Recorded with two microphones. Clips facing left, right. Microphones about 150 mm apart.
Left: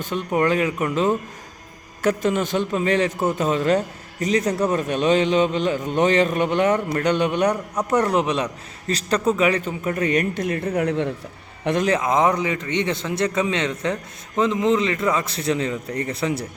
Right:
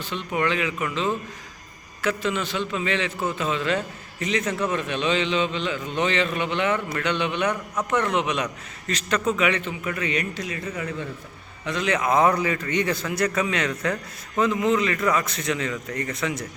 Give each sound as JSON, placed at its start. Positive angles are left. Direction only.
{"t": 0.0, "sound": "a man's voice", "side_deg": 45}
{"t": 11.6, "sound": "a man's voice", "side_deg": 55}
{"t": 11.9, "sound": "a man's voice", "side_deg": 25}